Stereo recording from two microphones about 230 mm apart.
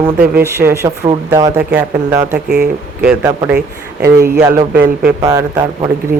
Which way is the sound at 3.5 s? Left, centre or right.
Right.